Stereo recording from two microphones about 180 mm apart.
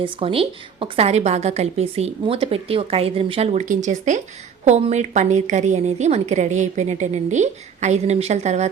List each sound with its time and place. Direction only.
0.0 s a woman's voice: 30° right (ahead or behind)